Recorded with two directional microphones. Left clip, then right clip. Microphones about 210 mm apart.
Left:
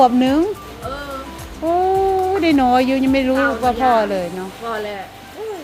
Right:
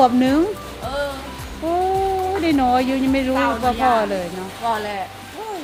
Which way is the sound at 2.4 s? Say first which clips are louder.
Left 2 dB; 30° left (ahead or behind).